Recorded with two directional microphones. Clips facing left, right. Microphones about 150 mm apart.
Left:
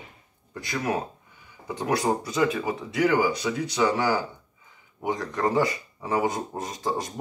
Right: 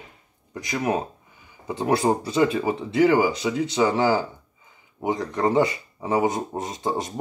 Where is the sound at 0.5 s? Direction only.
20° right (ahead or behind).